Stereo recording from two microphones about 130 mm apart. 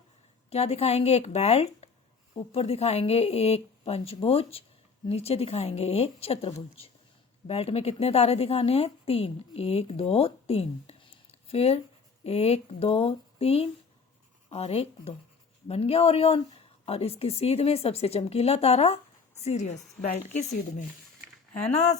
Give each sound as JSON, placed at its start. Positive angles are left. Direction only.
{"t": 0.5, "sound": "a woman's voice", "side_deg": 55}